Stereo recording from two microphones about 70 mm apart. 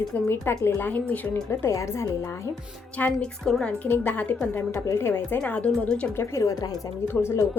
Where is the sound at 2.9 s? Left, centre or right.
Centre.